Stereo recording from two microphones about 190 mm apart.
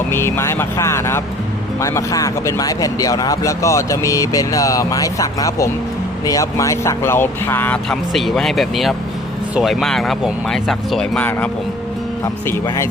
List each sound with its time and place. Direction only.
0.1 s speech: 15° left (ahead or behind)